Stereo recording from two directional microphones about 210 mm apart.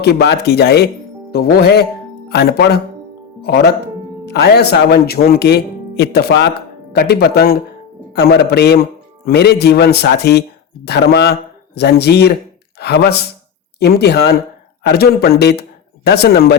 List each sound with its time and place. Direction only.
0.0 s speech: 50° left (ahead or behind)